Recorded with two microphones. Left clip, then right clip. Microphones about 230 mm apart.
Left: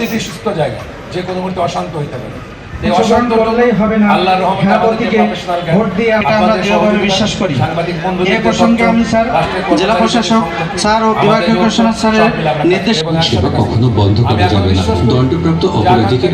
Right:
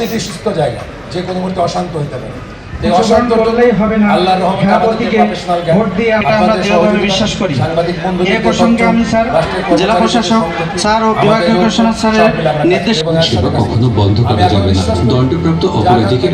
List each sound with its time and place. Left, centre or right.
2.9 s a man's voice: centre